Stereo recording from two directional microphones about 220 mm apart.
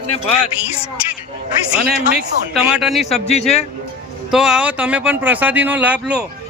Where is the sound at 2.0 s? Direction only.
5° right (ahead or behind).